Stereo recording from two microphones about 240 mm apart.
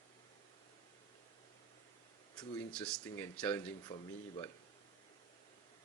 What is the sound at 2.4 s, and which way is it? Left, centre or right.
Speech, centre.